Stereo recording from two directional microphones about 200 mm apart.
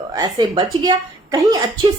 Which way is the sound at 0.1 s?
20° right (ahead or behind).